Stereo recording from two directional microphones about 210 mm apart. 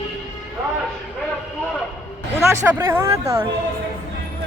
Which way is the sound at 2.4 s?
10° right (ahead or behind).